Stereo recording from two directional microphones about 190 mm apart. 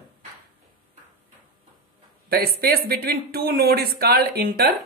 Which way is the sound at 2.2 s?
55° right (ahead or behind).